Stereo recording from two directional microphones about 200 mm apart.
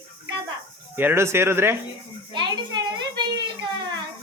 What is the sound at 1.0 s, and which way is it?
Speech, 10° right (ahead or behind).